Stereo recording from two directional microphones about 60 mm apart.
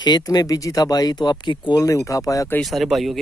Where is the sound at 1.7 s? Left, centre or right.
Left.